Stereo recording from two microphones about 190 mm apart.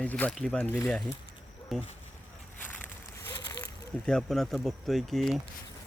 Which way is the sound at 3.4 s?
20° left (ahead or behind).